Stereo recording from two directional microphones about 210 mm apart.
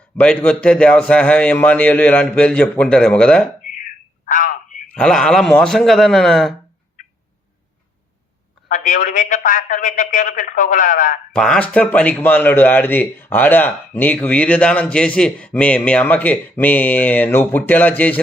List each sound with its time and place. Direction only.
0.2 s a man's voice: 5° left (ahead or behind)
4.3 s telephone: 40° left (ahead or behind)
4.9 s a man's voice: 5° left (ahead or behind)
8.7 s a man's voice: 40° left (ahead or behind)
11.3 s a man's voice: 5° left (ahead or behind)